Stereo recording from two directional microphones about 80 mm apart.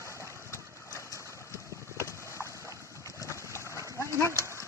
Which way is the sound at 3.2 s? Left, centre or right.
Left.